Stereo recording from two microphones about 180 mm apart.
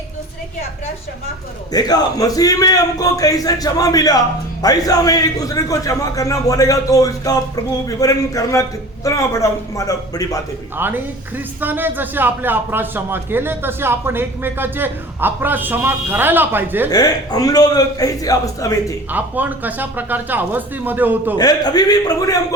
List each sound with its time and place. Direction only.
1.7 s a man's voice: 20° left (ahead or behind)
10.8 s a man's voice: 10° right (ahead or behind)
16.9 s a man's voice: 20° left (ahead or behind)
19.1 s a man's voice: 10° right (ahead or behind)
21.3 s a man's voice: 20° left (ahead or behind)